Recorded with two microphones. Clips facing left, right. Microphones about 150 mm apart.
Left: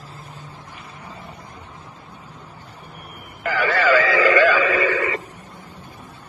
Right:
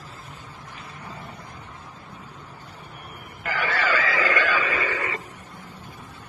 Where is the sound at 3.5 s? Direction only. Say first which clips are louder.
Left 7 dB; 90° left.